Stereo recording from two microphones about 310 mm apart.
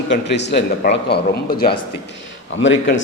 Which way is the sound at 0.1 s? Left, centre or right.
Left.